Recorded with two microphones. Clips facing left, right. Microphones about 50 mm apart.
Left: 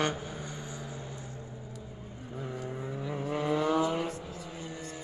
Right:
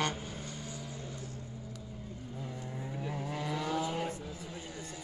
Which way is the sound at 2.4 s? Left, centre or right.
Left.